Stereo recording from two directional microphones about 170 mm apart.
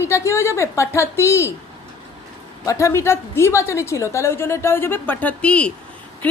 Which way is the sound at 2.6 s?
20° left (ahead or behind).